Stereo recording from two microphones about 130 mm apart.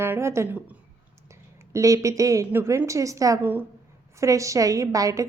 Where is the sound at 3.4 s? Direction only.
15° right (ahead or behind).